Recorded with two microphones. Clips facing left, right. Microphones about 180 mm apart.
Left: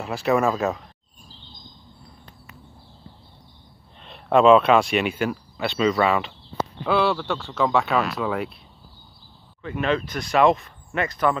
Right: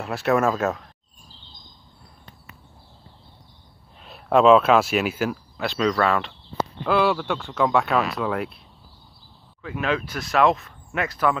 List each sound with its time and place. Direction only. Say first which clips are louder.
0.0 s speech: even; centre (ahead or behind)
4.0 s speech: even; 5° right (ahead or behind)
9.6 s speech: left 2 dB; 5° right (ahead or behind)